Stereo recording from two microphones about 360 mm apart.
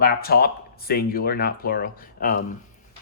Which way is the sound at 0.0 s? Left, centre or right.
Left.